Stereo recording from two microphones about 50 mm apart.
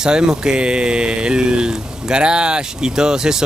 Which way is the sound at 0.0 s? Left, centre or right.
Centre.